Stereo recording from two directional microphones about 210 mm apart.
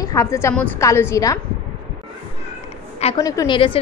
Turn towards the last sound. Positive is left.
turn(degrees=25)  # may be behind; listen again after turning